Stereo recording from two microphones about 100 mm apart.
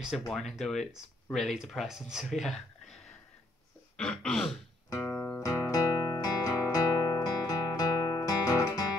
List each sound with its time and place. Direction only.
0.3 s speech: centre (ahead or behind)
3.9 s throat clearing: 10° left (ahead or behind)
4.8 s music: 30° left (ahead or behind)
5.1 s music: 20° left (ahead or behind)
5.4 s music: 35° left (ahead or behind)